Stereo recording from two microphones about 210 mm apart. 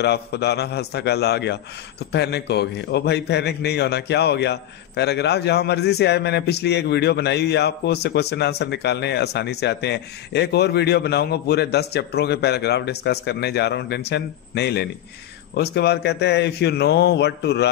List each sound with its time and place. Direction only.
0.0 s a man's voice: 50° left (ahead or behind)